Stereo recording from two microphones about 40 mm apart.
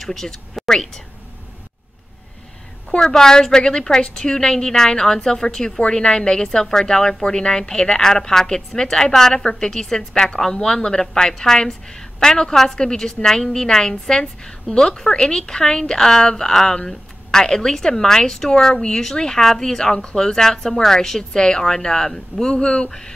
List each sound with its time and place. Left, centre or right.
0.0 s a woman's voice: centre
3.0 s a woman's voice: centre